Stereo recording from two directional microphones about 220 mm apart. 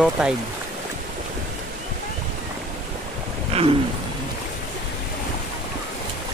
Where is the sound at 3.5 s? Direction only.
25° right (ahead or behind).